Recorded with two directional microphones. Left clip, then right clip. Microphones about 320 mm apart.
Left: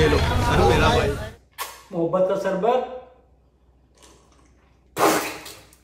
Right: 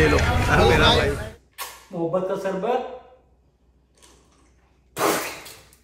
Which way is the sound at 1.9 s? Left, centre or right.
Centre.